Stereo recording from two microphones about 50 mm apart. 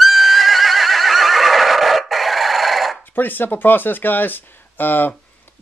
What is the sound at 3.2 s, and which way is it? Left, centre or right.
Speech, left.